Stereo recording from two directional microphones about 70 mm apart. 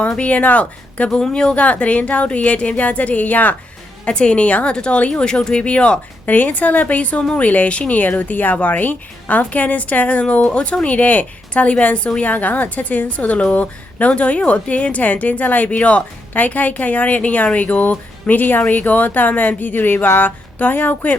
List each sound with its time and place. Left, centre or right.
0.2 s a woman's voice: left